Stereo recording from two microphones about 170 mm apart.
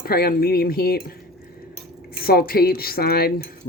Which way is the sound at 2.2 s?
60° left (ahead or behind).